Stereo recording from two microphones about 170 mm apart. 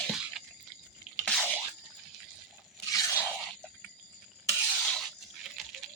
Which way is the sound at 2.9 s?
15° left (ahead or behind).